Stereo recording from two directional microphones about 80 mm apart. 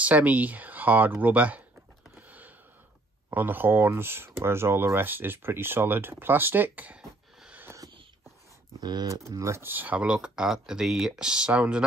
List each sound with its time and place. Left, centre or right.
0.0 s speech: centre
2.1 s a sound: centre
3.3 s speech: right
9.1 s speech: right; by 11.8 s centre